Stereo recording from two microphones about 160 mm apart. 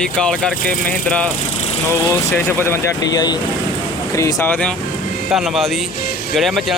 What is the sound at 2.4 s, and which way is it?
Speech, 15° left (ahead or behind).